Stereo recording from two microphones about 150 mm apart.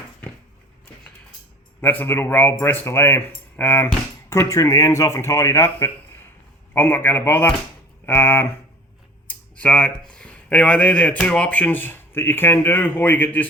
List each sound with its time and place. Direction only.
1.8 s speech: 15° left (ahead or behind)